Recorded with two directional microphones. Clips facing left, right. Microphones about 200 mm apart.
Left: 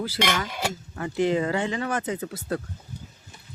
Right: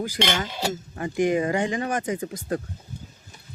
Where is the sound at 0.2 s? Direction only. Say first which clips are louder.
Even; 25° right (ahead or behind).